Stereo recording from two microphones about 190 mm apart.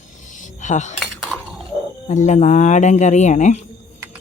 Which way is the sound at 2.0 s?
40° left (ahead or behind).